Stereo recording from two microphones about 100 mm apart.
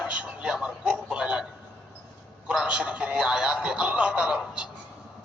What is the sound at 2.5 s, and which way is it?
A woman's voice, 10° right (ahead or behind).